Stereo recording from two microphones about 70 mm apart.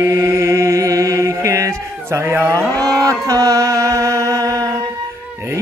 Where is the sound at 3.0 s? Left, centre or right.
Right.